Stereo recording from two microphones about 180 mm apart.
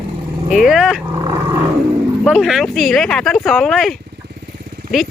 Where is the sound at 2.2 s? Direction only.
Centre (ahead or behind).